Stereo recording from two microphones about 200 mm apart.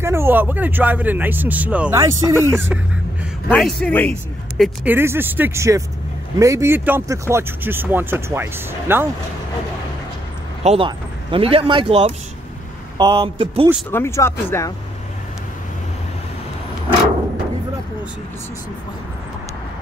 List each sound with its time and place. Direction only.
0.0 s speech: 10° right (ahead or behind)
3.4 s a man's voice: 5° left (ahead or behind)
4.6 s speech: 10° right (ahead or behind)
10.6 s speech: 30° right (ahead or behind)
13.8 s speech: 10° left (ahead or behind)